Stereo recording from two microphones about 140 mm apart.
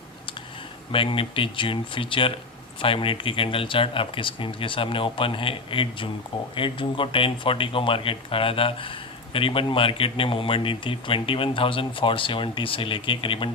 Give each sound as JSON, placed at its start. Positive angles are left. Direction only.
{"t": 0.9, "sound": "speech", "side_deg": 40}